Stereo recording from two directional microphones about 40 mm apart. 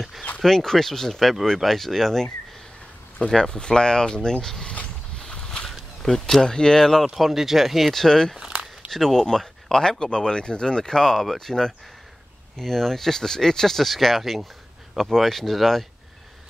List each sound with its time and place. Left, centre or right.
0.5 s speech: centre
3.3 s speech: centre
5.2 s a sound: left
5.7 s speech: centre
7.2 s speech: centre
7.9 s speech: centre